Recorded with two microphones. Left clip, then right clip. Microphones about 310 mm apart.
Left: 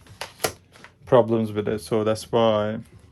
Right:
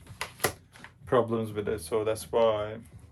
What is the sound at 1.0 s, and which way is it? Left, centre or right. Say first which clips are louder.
Speech: left 8 dB; left.